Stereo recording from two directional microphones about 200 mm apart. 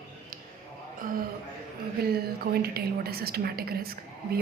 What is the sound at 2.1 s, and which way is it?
A woman's voice, 50° right (ahead or behind).